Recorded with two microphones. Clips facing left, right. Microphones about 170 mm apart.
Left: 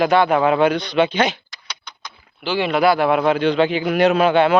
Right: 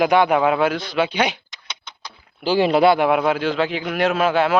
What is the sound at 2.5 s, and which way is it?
Speech, 35° right (ahead or behind).